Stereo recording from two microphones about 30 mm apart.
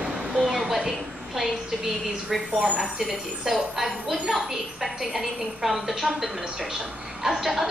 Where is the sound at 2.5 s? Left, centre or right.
Right.